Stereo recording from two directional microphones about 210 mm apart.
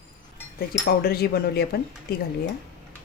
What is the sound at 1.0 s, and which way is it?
Speech, 45° left (ahead or behind).